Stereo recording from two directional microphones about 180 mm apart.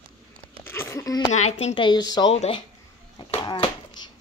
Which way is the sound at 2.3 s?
35° left (ahead or behind).